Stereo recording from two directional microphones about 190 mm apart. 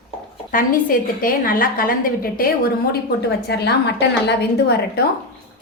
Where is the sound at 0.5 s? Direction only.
50° left (ahead or behind).